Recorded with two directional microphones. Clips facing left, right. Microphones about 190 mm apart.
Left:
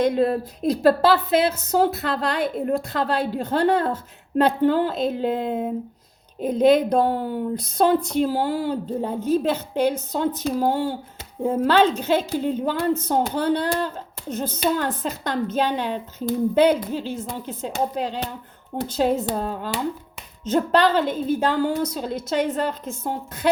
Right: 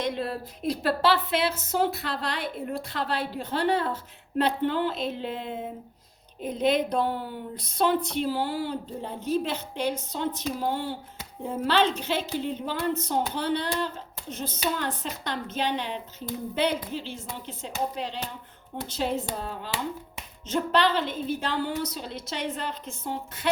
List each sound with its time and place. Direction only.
0.0 s a woman's voice: 45° left (ahead or behind)
6.6 s a woman's voice: 45° left (ahead or behind)